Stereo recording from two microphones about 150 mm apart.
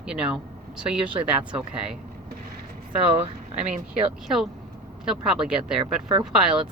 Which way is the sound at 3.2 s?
45° right (ahead or behind).